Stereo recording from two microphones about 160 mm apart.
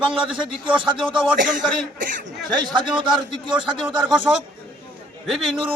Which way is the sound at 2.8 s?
30° right (ahead or behind).